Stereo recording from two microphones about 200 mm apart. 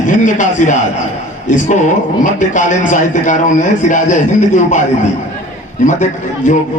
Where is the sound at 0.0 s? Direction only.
40° left (ahead or behind).